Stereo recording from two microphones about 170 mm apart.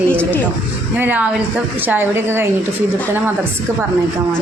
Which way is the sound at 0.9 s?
10° right (ahead or behind).